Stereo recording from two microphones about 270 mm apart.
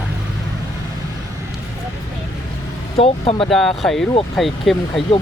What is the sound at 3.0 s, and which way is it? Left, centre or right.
Speech, centre.